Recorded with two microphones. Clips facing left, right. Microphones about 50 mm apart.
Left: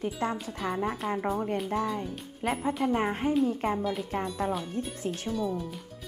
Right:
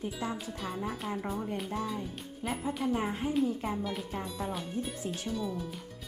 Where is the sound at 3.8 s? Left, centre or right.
Centre.